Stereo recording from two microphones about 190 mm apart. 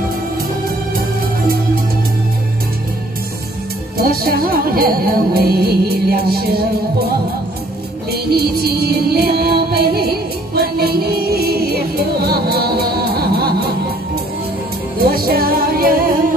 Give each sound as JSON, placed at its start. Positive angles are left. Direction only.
{"t": 4.0, "sound": "music", "side_deg": -50}
{"t": 8.1, "sound": "music", "side_deg": -55}
{"t": 15.0, "sound": "music", "side_deg": -50}